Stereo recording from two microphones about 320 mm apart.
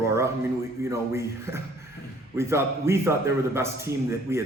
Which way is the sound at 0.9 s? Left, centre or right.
Centre.